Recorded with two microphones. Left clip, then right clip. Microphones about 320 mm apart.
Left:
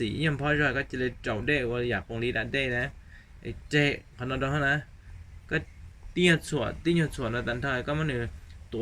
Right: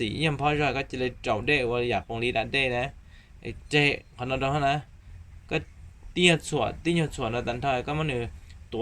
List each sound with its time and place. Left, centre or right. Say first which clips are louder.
0.0 s speech: right 3 dB; centre
6.1 s speech: right 2 dB; centre